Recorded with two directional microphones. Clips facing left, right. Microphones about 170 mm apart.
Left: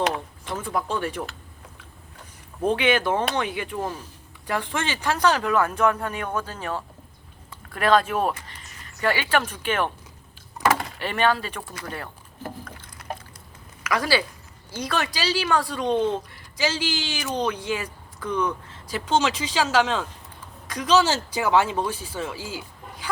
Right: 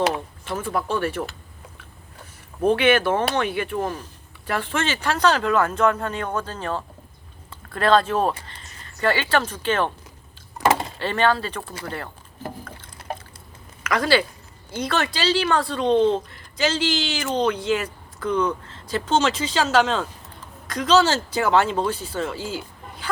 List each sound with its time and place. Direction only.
0.6 s speech: 15° left (ahead or behind)
2.7 s speech: 15° left (ahead or behind)
10.6 s a sound: 25° right (ahead or behind)
11.0 s speech: 15° left (ahead or behind)
11.7 s speech: 30° right (ahead or behind)
12.4 s a sound: 30° right (ahead or behind)
13.8 s speech: 10° left (ahead or behind)
15.8 s speech: 30° right (ahead or behind)
16.3 s speech: 10° left (ahead or behind)